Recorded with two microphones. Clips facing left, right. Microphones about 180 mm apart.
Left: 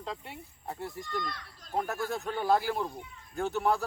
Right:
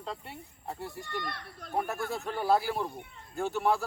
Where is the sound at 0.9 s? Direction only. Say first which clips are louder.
Left 1 dB; 60° right (ahead or behind).